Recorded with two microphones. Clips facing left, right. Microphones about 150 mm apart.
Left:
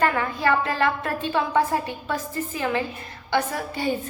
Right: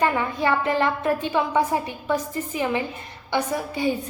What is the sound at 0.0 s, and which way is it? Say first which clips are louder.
A woman's voice: even; 20° right (ahead or behind).